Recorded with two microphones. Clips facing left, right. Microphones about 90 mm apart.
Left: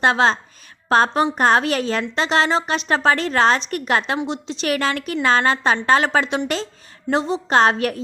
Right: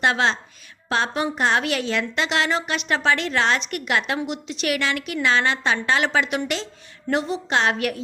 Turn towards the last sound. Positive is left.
turn(degrees=35)  # may be behind; listen again after turning